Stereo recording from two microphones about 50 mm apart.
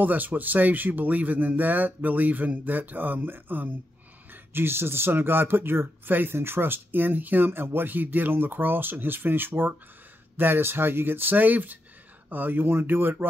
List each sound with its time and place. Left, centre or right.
0.0 s speech: right